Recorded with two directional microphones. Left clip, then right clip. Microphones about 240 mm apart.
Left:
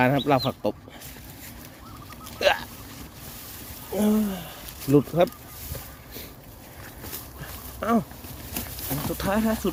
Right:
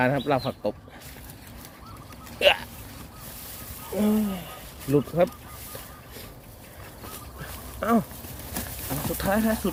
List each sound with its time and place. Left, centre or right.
0.0 s speech: centre
2.4 s speech: centre
3.9 s speech: centre
7.8 s speech: centre